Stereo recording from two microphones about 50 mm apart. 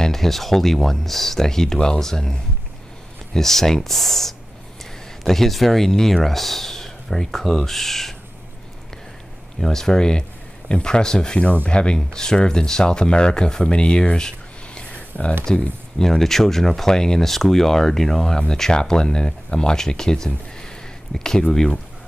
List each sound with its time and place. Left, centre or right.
0.0 s speech: centre
3.3 s speech: centre
9.6 s speech: centre; by 15.3 s left
16.0 s speech: centre